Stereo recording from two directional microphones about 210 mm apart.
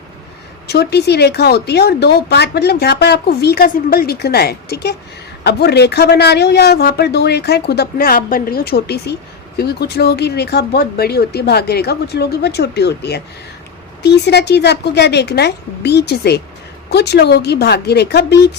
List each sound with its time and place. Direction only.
0.7 s a woman's voice: 50° left (ahead or behind)